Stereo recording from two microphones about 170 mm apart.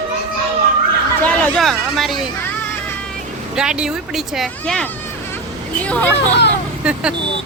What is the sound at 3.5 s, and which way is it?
Speech, 5° right (ahead or behind).